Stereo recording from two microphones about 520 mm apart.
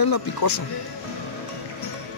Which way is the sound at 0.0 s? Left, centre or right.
Left.